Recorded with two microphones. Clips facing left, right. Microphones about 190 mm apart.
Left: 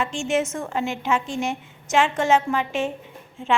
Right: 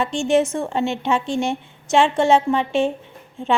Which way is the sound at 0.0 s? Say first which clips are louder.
Right 5 dB; 35° right (ahead or behind).